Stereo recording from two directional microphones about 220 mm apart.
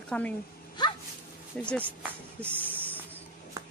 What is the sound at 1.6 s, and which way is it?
Speech, 5° left (ahead or behind).